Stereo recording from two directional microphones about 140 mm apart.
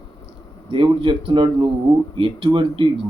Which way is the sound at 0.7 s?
40° right (ahead or behind).